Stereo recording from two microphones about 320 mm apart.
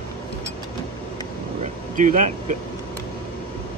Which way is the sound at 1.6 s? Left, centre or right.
Right.